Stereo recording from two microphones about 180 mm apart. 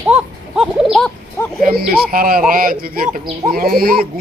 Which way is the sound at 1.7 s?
55° right (ahead or behind).